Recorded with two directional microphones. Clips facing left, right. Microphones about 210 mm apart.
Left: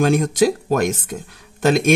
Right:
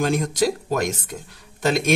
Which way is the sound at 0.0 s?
55° left (ahead or behind).